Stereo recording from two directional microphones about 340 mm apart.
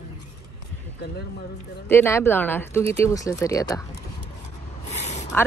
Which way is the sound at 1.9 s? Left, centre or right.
Centre.